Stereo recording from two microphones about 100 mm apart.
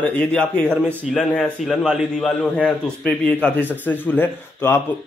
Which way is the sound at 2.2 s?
10° left (ahead or behind).